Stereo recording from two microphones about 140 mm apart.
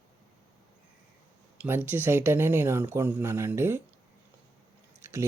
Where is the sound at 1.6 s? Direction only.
15° right (ahead or behind).